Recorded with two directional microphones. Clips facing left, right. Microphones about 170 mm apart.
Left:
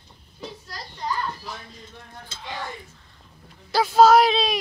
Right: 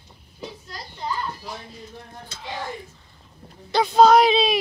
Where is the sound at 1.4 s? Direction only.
25° right (ahead or behind).